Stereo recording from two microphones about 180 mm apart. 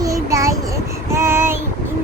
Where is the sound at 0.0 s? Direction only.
20° right (ahead or behind).